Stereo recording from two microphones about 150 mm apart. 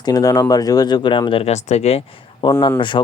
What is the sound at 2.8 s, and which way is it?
Speech, 30° left (ahead or behind).